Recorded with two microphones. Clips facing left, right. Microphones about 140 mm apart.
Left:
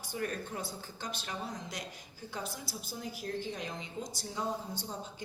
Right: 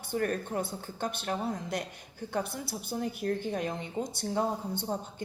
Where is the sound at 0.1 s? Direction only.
55° right (ahead or behind).